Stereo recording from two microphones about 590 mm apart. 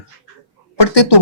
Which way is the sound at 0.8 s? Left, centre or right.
Left.